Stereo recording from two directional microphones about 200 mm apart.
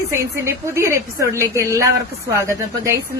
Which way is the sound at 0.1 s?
15° right (ahead or behind).